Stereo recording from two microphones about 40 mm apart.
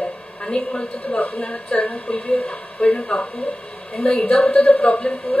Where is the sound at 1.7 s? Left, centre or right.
Left.